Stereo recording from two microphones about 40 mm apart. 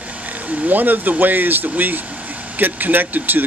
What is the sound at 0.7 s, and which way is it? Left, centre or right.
Speech, right.